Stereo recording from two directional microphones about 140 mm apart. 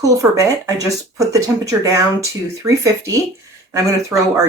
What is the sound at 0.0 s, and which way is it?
Speech, 25° right (ahead or behind).